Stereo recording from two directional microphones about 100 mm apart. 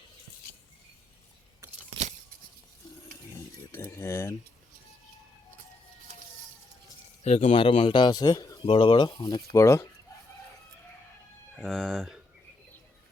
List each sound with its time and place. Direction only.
3.7 s speech: 25° left (ahead or behind)
7.3 s speech: 70° left (ahead or behind); by 8.5 s 40° left (ahead or behind)
8.6 s speech: 70° left (ahead or behind); by 9.9 s 30° left (ahead or behind)
11.6 s speech: centre (ahead or behind)